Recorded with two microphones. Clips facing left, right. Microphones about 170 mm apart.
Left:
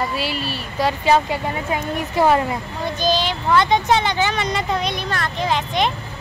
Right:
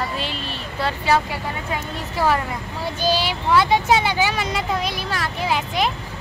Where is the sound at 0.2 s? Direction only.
10° left (ahead or behind).